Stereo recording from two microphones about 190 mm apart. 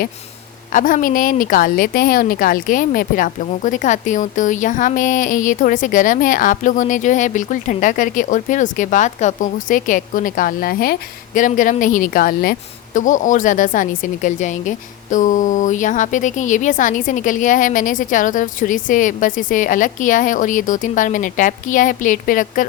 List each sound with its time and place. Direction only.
0.7 s a woman's voice: 45° left (ahead or behind)